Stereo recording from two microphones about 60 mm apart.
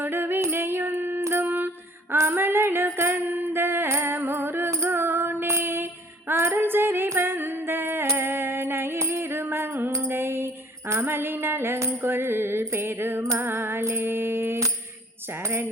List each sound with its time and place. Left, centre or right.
0.0 s singing: right
0.4 s a sound: right
1.2 s female singing: right
2.1 s music: right
4.9 s female singing: right
6.6 s music: right
11.8 s music: right
12.1 s music: right
15.3 s jingle bell: right